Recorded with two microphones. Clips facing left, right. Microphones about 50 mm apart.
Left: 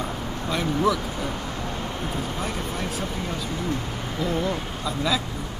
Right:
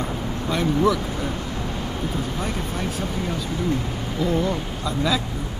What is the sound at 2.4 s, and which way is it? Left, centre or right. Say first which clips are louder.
Speech: right 2 dB; centre.